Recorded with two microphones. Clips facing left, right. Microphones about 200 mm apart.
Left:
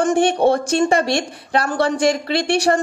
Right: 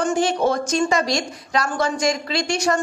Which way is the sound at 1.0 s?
60° left (ahead or behind).